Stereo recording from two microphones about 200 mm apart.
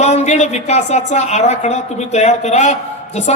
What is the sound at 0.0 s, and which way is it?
A man's voice, 35° left (ahead or behind).